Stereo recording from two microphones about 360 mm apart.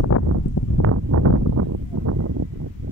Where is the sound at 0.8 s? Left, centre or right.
Right.